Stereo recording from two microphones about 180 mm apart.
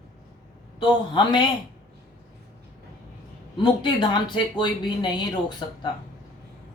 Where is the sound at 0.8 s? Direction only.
25° left (ahead or behind).